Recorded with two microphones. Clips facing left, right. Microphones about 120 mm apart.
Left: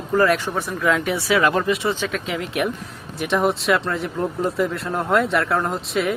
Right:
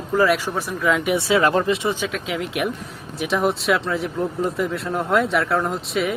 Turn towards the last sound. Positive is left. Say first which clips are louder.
# even
turn(degrees=0)  # may be behind; listen again after turning